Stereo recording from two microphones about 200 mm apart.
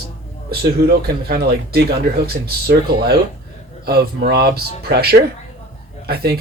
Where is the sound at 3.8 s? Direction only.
50° right (ahead or behind).